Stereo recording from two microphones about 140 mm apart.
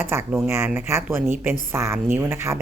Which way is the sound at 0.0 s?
15° right (ahead or behind).